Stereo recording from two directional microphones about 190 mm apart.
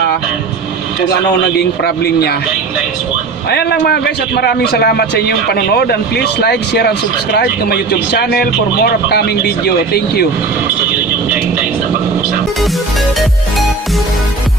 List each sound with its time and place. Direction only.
1.8 s a man's voice: 55° left (ahead or behind)
3.5 s a man's voice: 60° left (ahead or behind)